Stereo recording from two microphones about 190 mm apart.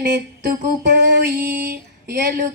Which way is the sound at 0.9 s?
60° right (ahead or behind).